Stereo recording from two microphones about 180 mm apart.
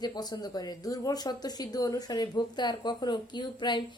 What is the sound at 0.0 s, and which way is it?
Speech, 20° left (ahead or behind).